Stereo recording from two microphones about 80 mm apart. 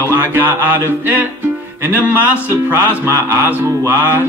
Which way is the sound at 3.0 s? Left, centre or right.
Right.